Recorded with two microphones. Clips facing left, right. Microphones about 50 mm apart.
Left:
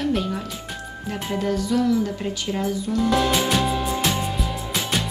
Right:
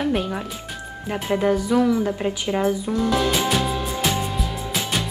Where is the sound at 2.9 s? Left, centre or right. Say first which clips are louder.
Left 4 dB; centre.